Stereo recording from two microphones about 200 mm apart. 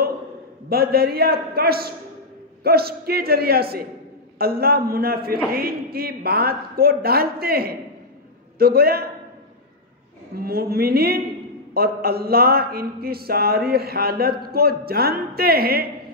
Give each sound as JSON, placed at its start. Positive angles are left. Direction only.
{"t": 0.7, "sound": "a man's voice", "side_deg": -50}
{"t": 10.3, "sound": "a man's voice", "side_deg": -50}